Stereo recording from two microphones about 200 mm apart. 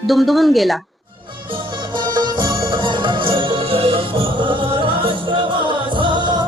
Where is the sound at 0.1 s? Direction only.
Centre (ahead or behind).